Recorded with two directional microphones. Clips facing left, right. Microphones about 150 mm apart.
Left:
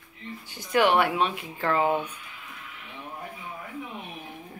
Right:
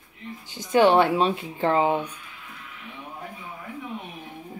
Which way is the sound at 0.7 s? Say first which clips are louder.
Right 4 dB; 30° right (ahead or behind).